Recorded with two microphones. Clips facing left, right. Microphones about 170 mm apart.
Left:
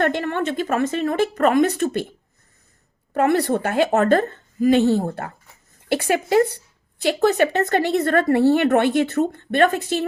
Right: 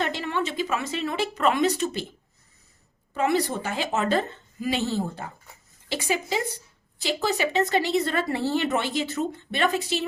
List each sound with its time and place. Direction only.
0.0 s a woman's voice: 55° left (ahead or behind)
3.2 s speech: 60° left (ahead or behind)